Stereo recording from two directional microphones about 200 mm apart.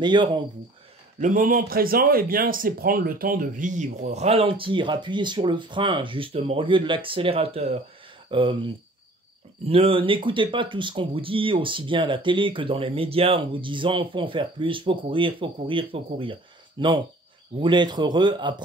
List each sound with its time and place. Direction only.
0.0 s speech: 20° right (ahead or behind)
1.2 s speech: 40° right (ahead or behind); by 8.5 s 25° right (ahead or behind)
9.7 s speech: 30° right (ahead or behind)